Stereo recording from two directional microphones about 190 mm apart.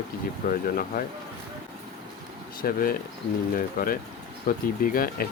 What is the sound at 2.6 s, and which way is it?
Speech, 50° left (ahead or behind).